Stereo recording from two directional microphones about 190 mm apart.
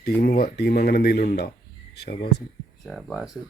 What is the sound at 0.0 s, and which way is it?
Speech, 55° left (ahead or behind).